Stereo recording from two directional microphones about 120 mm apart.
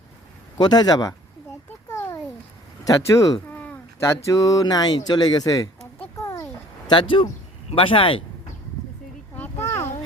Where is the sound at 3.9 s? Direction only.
25° left (ahead or behind).